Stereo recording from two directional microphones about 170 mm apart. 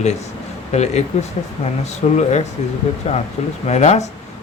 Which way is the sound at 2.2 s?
40° left (ahead or behind).